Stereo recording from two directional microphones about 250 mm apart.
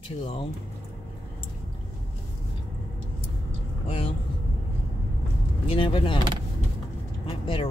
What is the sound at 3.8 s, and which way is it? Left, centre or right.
Vehicle, left.